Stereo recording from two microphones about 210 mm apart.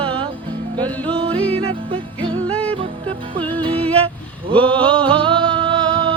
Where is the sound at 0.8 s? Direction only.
5° left (ahead or behind).